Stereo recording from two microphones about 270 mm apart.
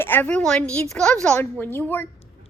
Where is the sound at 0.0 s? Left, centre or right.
Centre.